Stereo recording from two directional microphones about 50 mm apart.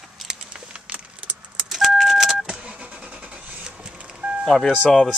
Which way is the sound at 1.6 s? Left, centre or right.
Centre.